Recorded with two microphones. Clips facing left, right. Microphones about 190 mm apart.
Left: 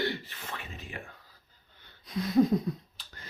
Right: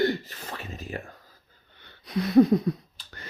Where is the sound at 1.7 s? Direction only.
70° right (ahead or behind).